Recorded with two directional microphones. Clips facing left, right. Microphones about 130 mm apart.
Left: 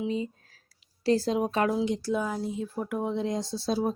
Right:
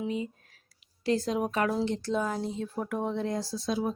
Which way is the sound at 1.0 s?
35° left (ahead or behind).